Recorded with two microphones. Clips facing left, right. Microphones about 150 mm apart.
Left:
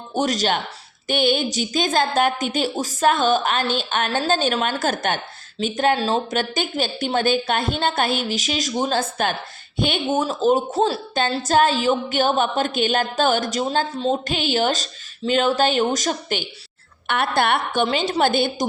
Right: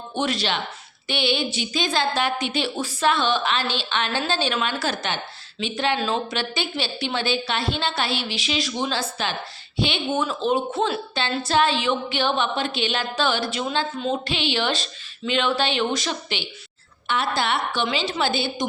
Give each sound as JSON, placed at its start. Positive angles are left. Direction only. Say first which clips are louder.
{"t": 0.1, "sound": "a woman's voice", "louder": "left 4 dB", "side_deg": 40}
{"t": 17.1, "sound": "a woman's voice", "louder": "left 4 dB", "side_deg": 60}